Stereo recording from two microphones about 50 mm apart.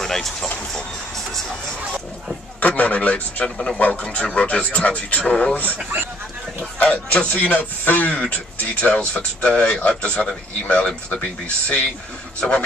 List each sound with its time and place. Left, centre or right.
0.0 s speech: centre
2.6 s speech: left
3.4 s speech: centre
6.8 s speech: left
7.2 s speech: left